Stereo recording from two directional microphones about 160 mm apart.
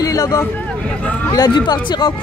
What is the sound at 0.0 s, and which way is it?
Hubbub, 20° left (ahead or behind).